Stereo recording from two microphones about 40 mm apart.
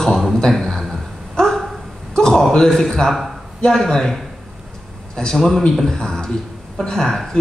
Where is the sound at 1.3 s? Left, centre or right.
Centre.